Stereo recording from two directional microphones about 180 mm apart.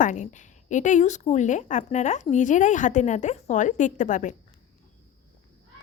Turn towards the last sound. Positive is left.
turn(degrees=40)  # may be behind; listen again after turning